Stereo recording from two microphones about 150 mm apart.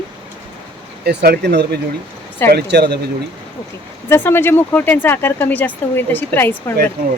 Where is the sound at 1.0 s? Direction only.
90° right.